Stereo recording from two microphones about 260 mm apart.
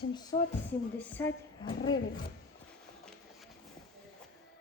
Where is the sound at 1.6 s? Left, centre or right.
Centre.